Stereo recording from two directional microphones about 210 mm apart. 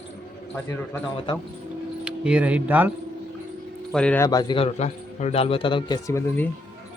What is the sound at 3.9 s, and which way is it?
Speech, 5° left (ahead or behind).